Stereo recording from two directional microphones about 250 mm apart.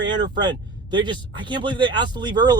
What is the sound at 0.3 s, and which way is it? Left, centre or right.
Speech, centre.